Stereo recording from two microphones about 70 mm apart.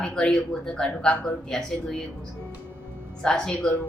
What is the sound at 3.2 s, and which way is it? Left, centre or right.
Speech, centre.